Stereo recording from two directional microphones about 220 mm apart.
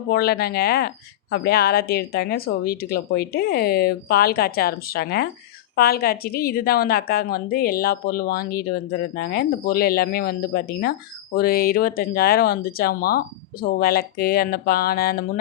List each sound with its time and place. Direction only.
0.1 s a woman's voice: 45° left (ahead or behind)